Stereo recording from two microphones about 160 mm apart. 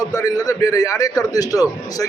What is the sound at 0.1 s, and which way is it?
A man's voice, 20° left (ahead or behind).